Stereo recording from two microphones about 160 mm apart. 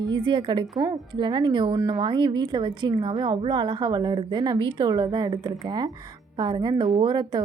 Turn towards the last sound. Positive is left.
turn(degrees=-30)  # may be behind; listen again after turning